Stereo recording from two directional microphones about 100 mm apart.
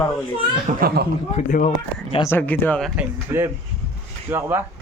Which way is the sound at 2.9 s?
25° right (ahead or behind).